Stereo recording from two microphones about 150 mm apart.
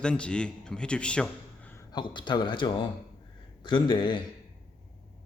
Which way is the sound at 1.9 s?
30° left (ahead or behind).